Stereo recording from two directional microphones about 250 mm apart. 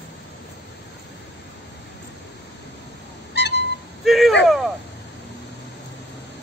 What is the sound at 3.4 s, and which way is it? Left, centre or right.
Vehicle, left.